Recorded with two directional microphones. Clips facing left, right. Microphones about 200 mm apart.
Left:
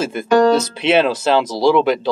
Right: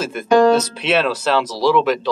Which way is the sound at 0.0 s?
25° left (ahead or behind).